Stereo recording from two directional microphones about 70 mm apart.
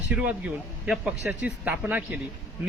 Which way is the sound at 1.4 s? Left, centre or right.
Right.